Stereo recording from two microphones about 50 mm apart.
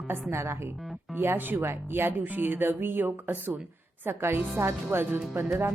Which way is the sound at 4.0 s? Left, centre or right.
Right.